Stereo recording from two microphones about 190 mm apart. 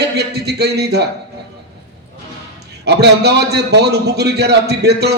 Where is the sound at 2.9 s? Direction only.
60° right (ahead or behind).